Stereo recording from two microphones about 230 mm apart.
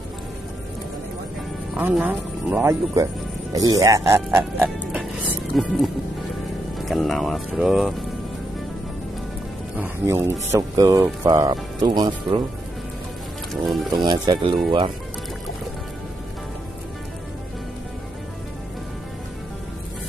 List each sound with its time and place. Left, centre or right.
1.8 s speech: centre
9.8 s speech: centre
13.5 s speech: centre
14.0 s speech: centre